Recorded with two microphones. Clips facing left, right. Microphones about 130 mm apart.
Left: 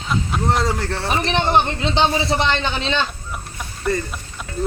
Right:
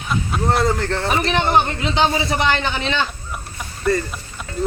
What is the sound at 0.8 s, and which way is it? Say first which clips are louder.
Speech: right 3 dB; 10° left (ahead or behind).